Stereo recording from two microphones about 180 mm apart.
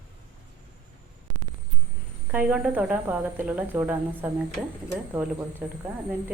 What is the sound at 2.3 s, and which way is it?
Speech, 5° right (ahead or behind).